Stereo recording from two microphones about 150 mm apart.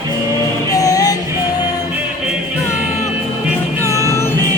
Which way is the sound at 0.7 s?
25° left (ahead or behind).